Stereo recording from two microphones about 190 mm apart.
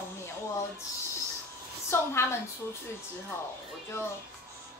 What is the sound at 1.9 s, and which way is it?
Speech, 15° left (ahead or behind).